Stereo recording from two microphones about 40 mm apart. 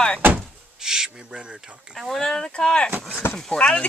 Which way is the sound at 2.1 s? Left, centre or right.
Centre.